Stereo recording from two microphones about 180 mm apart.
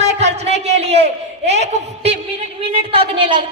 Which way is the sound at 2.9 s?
30° right (ahead or behind).